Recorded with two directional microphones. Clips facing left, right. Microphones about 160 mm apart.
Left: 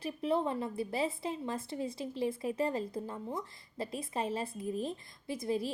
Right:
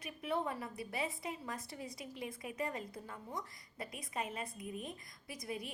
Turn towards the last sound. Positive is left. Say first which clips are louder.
# left 10 dB
turn(degrees=30)  # may be behind; listen again after turning